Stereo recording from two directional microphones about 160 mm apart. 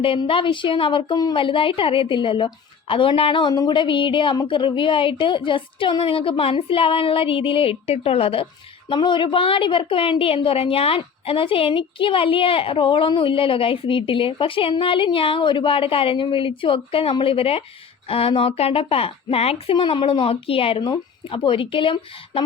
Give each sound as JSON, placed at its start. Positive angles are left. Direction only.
{"t": 0.0, "sound": "a woman's voice", "side_deg": 35}